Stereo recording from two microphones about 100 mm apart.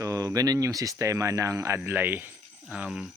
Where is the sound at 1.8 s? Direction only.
20° right (ahead or behind).